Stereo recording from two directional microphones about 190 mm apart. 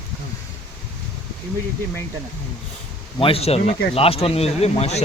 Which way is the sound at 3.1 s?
30° left (ahead or behind).